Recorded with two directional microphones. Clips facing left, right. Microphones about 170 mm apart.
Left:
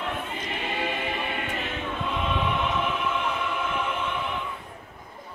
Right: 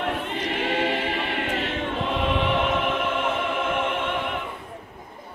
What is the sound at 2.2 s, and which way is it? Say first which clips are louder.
Music: right 4 dB; 75° right (ahead or behind).